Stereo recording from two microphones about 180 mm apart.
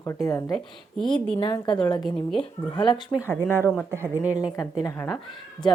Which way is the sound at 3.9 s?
15° right (ahead or behind).